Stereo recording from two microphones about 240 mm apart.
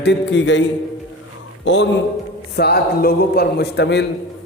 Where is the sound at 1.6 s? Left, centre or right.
Left.